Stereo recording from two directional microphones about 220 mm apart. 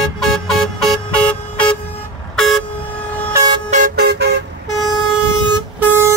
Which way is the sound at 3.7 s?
35° right (ahead or behind).